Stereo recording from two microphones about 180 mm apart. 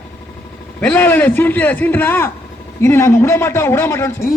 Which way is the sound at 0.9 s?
10° left (ahead or behind).